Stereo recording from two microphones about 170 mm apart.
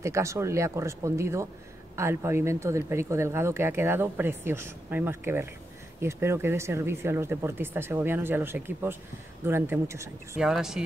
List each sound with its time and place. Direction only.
0.0 s speech: 15° right (ahead or behind)
10.4 s speech: 5° right (ahead or behind)